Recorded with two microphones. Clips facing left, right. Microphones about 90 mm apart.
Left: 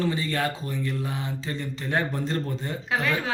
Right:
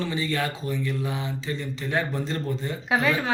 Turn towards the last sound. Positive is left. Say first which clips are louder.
# right 3 dB
turn(degrees=0)  # may be behind; listen again after turning